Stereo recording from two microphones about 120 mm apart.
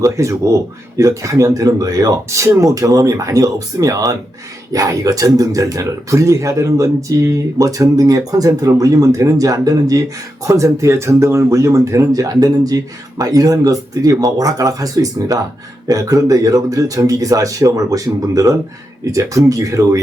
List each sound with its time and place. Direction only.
0.0 s speech: 25° right (ahead or behind)